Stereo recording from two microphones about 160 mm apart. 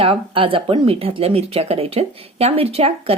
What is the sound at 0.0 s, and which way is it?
Speech, 35° right (ahead or behind).